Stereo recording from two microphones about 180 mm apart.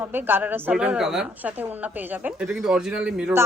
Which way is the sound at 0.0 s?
10° right (ahead or behind).